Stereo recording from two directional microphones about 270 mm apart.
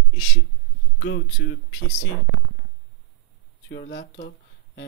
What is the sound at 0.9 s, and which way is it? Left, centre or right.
Speech, left.